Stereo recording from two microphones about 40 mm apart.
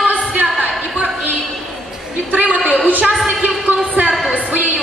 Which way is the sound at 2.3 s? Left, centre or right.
Right.